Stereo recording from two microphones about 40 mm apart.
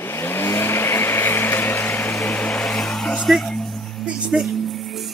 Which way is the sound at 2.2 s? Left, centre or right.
Left.